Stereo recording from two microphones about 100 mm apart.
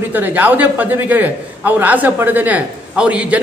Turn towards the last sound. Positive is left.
turn(degrees=-10)  # may be behind; listen again after turning